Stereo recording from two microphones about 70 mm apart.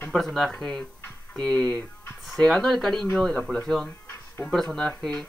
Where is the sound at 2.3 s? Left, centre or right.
Centre.